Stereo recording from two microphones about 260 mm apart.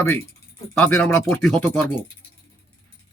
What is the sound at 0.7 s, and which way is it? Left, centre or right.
Speech, centre.